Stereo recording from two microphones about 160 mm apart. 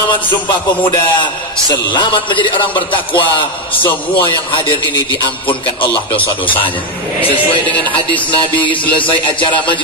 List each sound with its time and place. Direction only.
1.2 s a man's voice: 30° left (ahead or behind)
8.6 s a man's voice: 30° left (ahead or behind)